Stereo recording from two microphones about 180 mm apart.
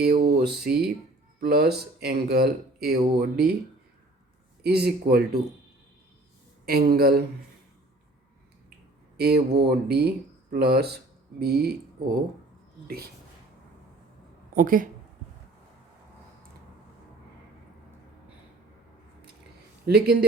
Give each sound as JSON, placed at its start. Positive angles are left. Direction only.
{"t": 0.0, "sound": "music", "side_deg": -65}
{"t": 1.4, "sound": "speech", "side_deg": -60}
{"t": 4.6, "sound": "speech", "side_deg": -65}
{"t": 6.7, "sound": "speech", "side_deg": -60}
{"t": 9.1, "sound": "speech", "side_deg": -65}
{"t": 14.5, "sound": "speech", "side_deg": -50}
{"t": 19.8, "sound": "speech", "side_deg": -60}